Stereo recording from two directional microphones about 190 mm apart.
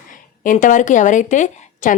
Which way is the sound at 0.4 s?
40° left (ahead or behind).